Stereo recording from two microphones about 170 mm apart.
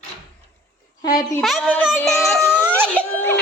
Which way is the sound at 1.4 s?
Centre (ahead or behind).